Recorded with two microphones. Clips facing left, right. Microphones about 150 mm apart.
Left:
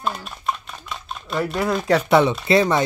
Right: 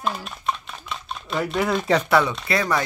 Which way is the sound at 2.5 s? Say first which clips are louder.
Left 6 dB; 25° left (ahead or behind).